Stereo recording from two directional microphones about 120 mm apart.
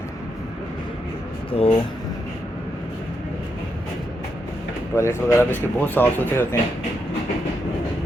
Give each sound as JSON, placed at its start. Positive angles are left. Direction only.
{"t": 1.5, "sound": "speech", "side_deg": 50}
{"t": 4.9, "sound": "speech", "side_deg": 25}